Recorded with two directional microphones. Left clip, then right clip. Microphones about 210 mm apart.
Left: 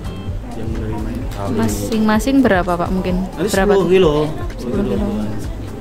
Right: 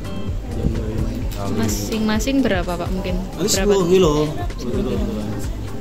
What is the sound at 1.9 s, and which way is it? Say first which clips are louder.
A woman's voice: left 6 dB; 15° left (ahead or behind).